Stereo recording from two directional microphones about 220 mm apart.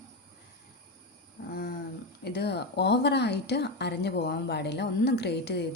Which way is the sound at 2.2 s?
45° left (ahead or behind).